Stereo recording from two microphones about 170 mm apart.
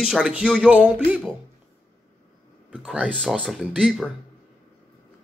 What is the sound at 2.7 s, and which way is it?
Speech, 5° right (ahead or behind).